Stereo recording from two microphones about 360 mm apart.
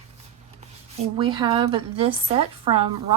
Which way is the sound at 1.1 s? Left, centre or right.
Centre.